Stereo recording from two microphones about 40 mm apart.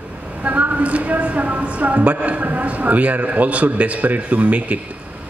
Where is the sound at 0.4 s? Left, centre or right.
Right.